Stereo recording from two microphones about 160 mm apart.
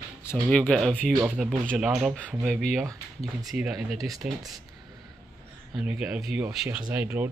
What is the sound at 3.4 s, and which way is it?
Speech, 5° right (ahead or behind).